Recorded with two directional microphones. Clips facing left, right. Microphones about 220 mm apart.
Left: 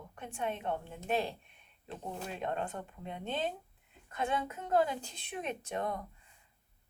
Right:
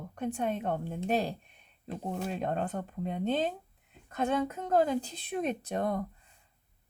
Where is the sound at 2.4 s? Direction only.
40° right (ahead or behind).